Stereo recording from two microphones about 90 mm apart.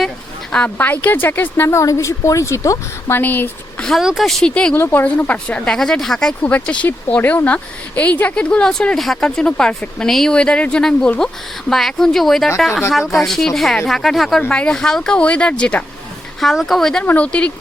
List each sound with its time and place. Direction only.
0.5 s speech: 15° left (ahead or behind); by 3.2 s 35° left (ahead or behind)
3.2 s speech: 20° left (ahead or behind)
3.8 s a woman's voice: 5° left (ahead or behind)
4.8 s a woman's voice: 25° left (ahead or behind)
16.4 s a woman's voice: centre (ahead or behind)
17.0 s a woman's voice: 15° left (ahead or behind)